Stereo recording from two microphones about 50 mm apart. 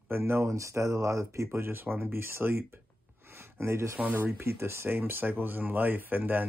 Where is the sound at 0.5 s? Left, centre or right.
Right.